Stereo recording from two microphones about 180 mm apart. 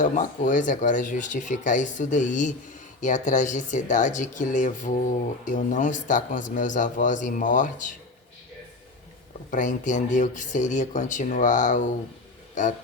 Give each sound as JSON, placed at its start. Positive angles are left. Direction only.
{"t": 0.0, "sound": "speech", "side_deg": 45}
{"t": 9.5, "sound": "speech", "side_deg": 45}